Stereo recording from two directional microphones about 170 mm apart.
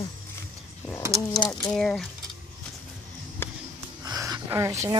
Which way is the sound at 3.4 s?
15° left (ahead or behind).